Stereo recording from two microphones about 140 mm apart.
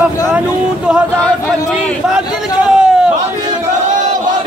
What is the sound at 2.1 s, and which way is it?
A man's voice, 5° right (ahead or behind).